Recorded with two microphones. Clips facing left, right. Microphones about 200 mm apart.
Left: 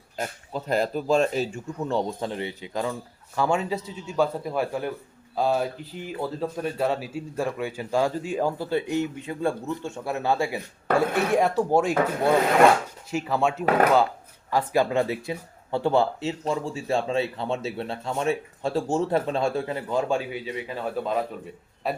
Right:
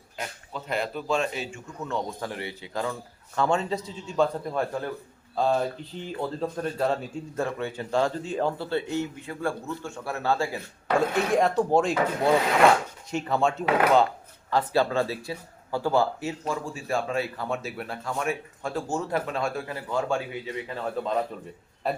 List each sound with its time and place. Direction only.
0.2 s speech: 40° left (ahead or behind); by 10.6 s 15° left (ahead or behind)
10.9 s speech: 55° left (ahead or behind)
11.3 s a man's voice: 5° left (ahead or behind)